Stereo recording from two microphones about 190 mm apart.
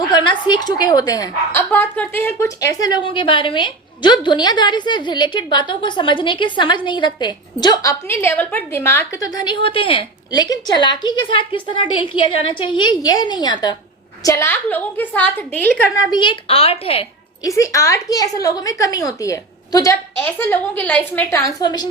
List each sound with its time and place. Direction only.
0.1 s a woman's voice: 25° left (ahead or behind)
16.1 s a woman's voice: 25° left (ahead or behind)
17.4 s a woman's voice: 15° left (ahead or behind)